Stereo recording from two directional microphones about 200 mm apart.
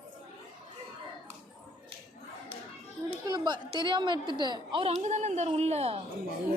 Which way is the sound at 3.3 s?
20° right (ahead or behind).